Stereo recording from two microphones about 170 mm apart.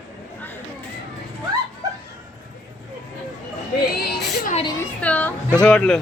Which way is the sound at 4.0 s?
65° left (ahead or behind).